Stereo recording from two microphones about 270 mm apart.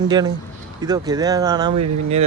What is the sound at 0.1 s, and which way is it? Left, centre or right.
Speech, centre.